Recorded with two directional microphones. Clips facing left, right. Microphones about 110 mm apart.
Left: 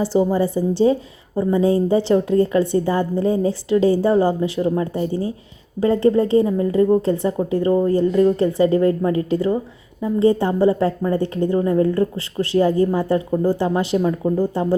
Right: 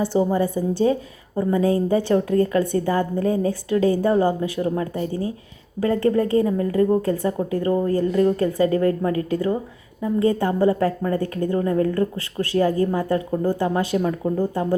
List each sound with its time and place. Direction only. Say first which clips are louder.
0.2 s a woman's voice: left 2 dB; 15° left (ahead or behind)
0.8 s a woman's voice: left 3 dB; 25° left (ahead or behind)